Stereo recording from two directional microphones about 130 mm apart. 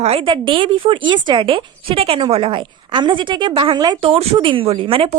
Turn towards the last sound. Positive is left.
turn(degrees=-45)  # may be behind; listen again after turning